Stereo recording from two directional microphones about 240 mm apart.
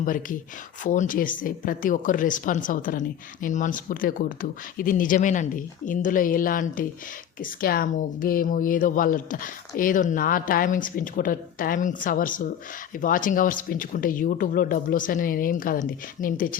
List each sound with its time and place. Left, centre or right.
0.0 s speech: left